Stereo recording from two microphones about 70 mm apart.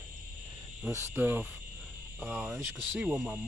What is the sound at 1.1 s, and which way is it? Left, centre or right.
Speech, right.